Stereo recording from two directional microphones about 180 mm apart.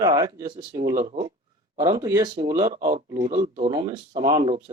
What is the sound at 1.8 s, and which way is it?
Speech, 20° right (ahead or behind).